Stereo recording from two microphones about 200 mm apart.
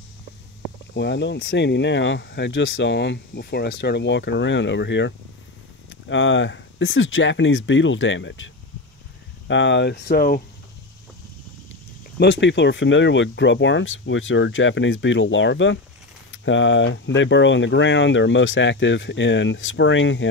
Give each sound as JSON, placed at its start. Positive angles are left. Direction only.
{"t": 0.9, "sound": "speech", "side_deg": 60}
{"t": 9.5, "sound": "speech", "side_deg": 65}
{"t": 12.2, "sound": "speech", "side_deg": 65}